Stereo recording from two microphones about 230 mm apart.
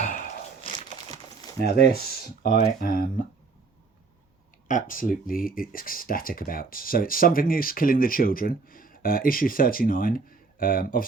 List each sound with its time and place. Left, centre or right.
0.0 s a sound: left
1.6 s speech: left
4.7 s speech: left